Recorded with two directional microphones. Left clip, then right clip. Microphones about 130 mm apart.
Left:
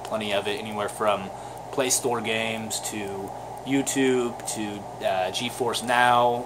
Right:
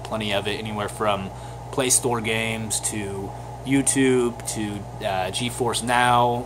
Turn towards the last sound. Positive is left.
turn(degrees=-30)  # may be behind; listen again after turning